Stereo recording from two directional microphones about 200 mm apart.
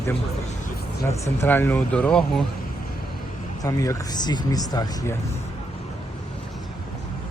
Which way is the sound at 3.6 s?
15° left (ahead or behind).